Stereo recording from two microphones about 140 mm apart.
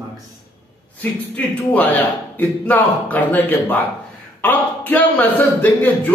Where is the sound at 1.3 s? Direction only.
10° left (ahead or behind).